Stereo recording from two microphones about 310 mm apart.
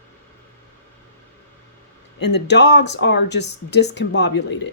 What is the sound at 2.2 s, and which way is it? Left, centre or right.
Speech, left.